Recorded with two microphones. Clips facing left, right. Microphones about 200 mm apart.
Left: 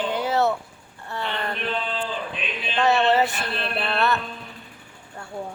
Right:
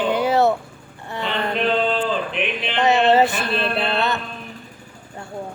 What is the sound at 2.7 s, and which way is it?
Speech, 20° right (ahead or behind).